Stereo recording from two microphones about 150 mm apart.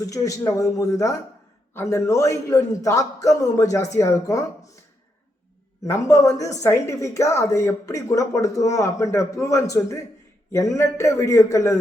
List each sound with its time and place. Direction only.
0.0 s a woman's voice: 20° left (ahead or behind)
5.8 s a woman's voice: 20° left (ahead or behind)